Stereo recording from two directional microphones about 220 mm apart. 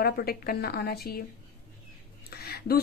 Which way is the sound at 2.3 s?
45° left (ahead or behind).